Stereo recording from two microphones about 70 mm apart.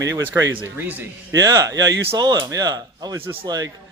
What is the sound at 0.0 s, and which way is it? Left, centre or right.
Speech, right.